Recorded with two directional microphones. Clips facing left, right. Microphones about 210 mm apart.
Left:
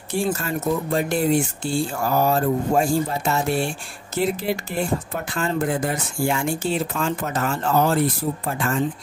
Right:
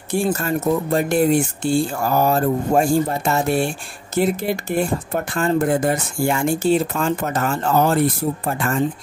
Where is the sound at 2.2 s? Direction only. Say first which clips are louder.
Right 2 dB; 50° right (ahead or behind).